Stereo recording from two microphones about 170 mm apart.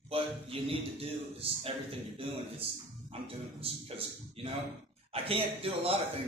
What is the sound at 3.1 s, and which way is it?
A man's voice, 35° right (ahead or behind).